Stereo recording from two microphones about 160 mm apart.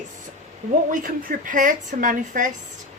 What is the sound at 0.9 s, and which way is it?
A woman's voice, 55° right (ahead or behind).